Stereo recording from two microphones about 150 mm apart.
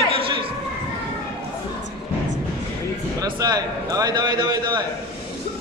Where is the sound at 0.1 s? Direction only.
35° right (ahead or behind).